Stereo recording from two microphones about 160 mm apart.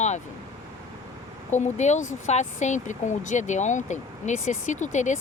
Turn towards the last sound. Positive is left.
turn(degrees=50)  # may be behind; listen again after turning